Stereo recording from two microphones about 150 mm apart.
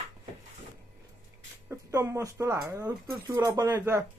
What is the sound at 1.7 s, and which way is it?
Speech, 20° right (ahead or behind).